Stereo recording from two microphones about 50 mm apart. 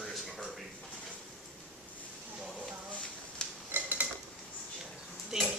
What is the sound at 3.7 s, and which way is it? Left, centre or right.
Dishes, right.